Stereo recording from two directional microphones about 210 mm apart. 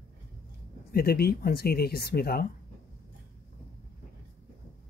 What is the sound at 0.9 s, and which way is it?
Speech, 45° left (ahead or behind).